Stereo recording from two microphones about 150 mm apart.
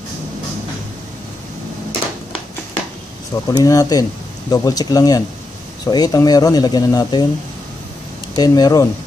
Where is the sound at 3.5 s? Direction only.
25° left (ahead or behind).